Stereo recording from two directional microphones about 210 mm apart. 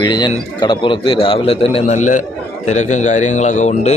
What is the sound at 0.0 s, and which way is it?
A man's voice, 20° left (ahead or behind).